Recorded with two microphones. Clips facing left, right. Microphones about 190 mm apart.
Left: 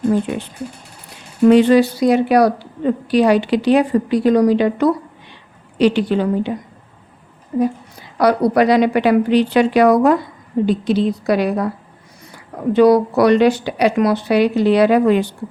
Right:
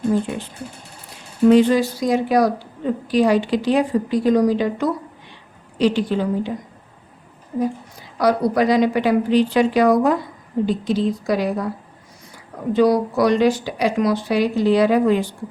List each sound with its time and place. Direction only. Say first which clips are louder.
1.5 s a woman's voice: left 3 dB; 70° left (ahead or behind)
7.5 s a woman's voice: left 4 dB; 55° left (ahead or behind)
12.7 s speech: left 5 dB; 65° left (ahead or behind)